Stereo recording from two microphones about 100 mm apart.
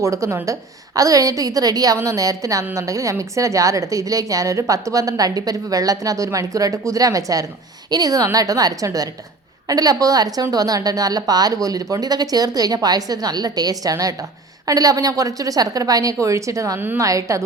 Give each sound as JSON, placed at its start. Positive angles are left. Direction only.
{"t": 0.0, "sound": "a woman's voice", "side_deg": -30}